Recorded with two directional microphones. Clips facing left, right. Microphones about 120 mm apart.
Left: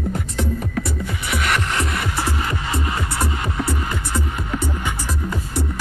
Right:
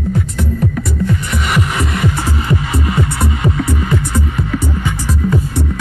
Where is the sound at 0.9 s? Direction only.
Centre (ahead or behind).